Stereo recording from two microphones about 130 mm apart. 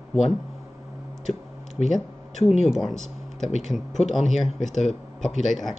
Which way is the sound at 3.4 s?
65° left (ahead or behind).